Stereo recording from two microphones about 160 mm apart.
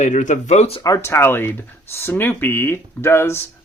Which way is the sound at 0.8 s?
20° left (ahead or behind).